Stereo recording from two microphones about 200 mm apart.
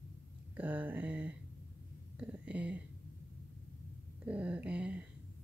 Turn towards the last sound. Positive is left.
turn(degrees=-5)  # may be behind; listen again after turning